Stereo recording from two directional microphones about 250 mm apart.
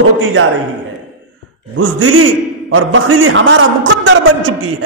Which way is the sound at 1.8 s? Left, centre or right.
Right.